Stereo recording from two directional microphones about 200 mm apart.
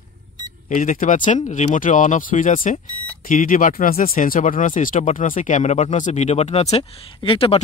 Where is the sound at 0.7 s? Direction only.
40° left (ahead or behind).